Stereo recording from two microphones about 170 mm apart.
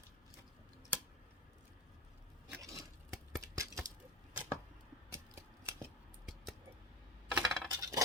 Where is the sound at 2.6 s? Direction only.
20° right (ahead or behind).